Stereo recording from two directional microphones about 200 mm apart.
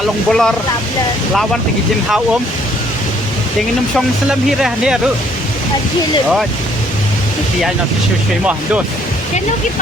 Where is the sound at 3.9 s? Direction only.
5° right (ahead or behind).